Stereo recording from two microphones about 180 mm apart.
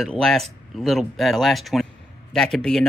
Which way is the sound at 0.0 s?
Centre (ahead or behind).